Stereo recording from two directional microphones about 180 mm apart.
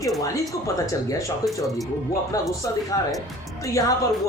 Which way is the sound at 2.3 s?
20° left (ahead or behind).